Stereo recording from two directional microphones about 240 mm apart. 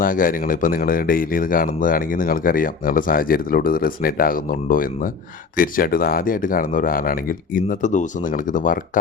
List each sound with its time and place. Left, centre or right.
0.0 s speech: left